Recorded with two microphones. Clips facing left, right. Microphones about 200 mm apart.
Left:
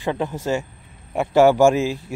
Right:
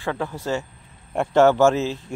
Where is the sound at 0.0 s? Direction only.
15° left (ahead or behind).